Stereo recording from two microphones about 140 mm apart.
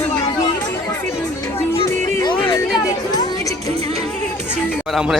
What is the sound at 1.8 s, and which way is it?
Speech, 20° left (ahead or behind).